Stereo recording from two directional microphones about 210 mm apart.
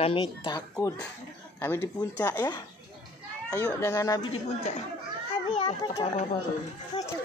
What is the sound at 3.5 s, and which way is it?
Speech, 15° left (ahead or behind).